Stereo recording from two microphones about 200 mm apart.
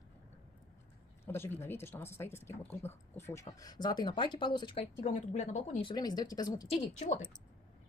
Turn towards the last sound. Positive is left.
turn(degrees=40)  # may be behind; listen again after turning